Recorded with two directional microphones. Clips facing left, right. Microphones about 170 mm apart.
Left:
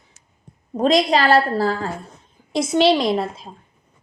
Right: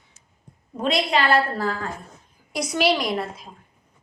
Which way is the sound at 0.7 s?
40° left (ahead or behind).